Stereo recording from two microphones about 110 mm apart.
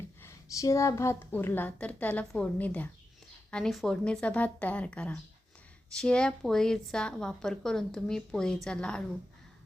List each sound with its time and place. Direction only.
0.2 s a woman's voice: 30° left (ahead or behind)
3.5 s a woman's voice: 5° left (ahead or behind)